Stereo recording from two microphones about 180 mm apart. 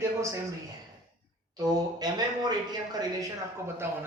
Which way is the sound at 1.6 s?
20° right (ahead or behind).